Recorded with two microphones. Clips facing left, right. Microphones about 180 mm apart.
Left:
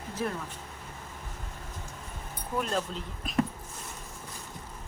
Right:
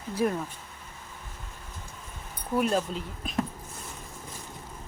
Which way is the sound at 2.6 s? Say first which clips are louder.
Right 5 dB; 10° right (ahead or behind).